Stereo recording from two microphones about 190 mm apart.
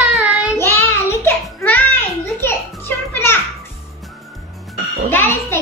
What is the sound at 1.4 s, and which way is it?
Children playing, 10° left (ahead or behind).